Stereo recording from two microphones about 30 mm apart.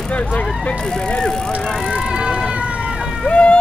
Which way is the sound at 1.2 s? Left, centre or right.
Left.